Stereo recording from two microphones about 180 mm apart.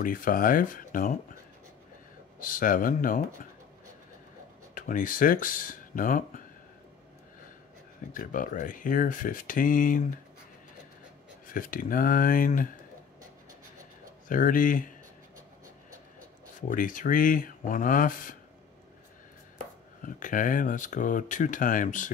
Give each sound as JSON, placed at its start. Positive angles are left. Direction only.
{"t": 0.0, "sound": "speech", "side_deg": 50}
{"t": 2.4, "sound": "speech", "side_deg": 50}
{"t": 4.7, "sound": "speech", "side_deg": 50}
{"t": 8.1, "sound": "speech", "side_deg": 50}
{"t": 11.4, "sound": "speech", "side_deg": 50}
{"t": 14.3, "sound": "speech", "side_deg": 50}
{"t": 16.6, "sound": "speech", "side_deg": 50}
{"t": 20.0, "sound": "speech", "side_deg": 50}